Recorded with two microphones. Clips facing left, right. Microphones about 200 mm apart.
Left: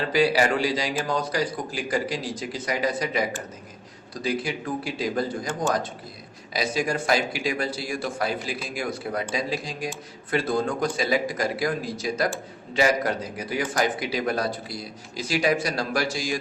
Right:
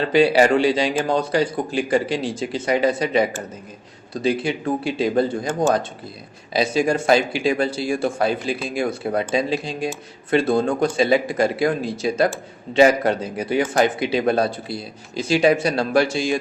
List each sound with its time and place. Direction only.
0.1 s a man's voice: 25° right (ahead or behind)